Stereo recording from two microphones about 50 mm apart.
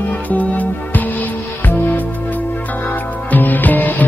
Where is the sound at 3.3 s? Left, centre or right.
Left.